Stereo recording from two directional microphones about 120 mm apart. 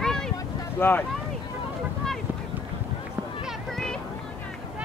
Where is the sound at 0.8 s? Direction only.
15° left (ahead or behind).